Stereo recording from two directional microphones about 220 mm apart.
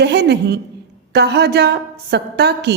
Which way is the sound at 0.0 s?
50° right (ahead or behind).